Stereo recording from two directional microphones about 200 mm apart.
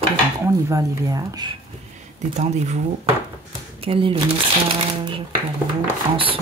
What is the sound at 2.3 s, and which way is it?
Speech, 35° right (ahead or behind).